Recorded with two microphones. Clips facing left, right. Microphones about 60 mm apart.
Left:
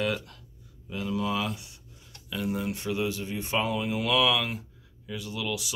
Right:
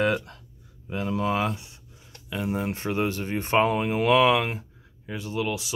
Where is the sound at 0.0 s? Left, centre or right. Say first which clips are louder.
Right 5 dB; right.